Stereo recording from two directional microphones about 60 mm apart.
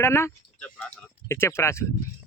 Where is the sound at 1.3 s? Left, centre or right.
Left.